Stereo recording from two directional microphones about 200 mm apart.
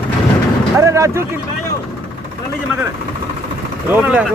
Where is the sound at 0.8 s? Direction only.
15° right (ahead or behind).